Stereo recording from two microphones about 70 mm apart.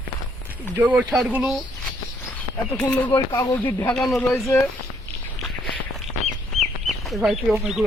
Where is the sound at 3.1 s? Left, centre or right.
Left.